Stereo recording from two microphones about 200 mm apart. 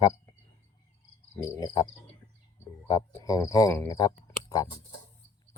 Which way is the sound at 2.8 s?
20° left (ahead or behind).